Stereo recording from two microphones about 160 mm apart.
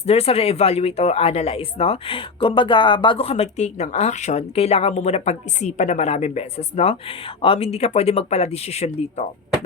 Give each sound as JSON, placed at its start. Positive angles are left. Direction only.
{"t": 0.0, "sound": "speech", "side_deg": 40}